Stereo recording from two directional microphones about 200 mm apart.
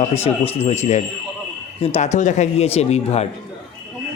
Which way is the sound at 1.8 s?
35° left (ahead or behind).